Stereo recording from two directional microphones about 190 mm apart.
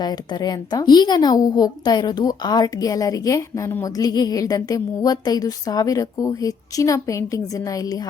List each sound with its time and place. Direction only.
0.0 s a woman's voice: 20° left (ahead or behind)